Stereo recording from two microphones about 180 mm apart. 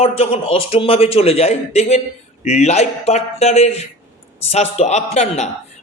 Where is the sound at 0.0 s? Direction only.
30° left (ahead or behind).